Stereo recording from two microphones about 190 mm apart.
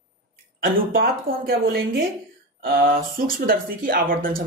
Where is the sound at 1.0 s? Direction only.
50° right (ahead or behind).